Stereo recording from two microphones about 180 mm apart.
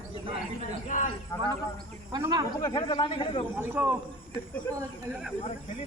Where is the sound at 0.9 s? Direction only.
45° left (ahead or behind).